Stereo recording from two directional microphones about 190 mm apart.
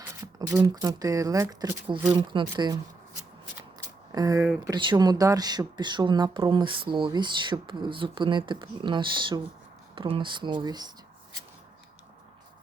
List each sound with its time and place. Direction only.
0.3 s speech: 20° right (ahead or behind)
2.1 s speech: 25° right (ahead or behind)
3.8 s a sound: 20° right (ahead or behind)
4.6 s speech: 25° right (ahead or behind)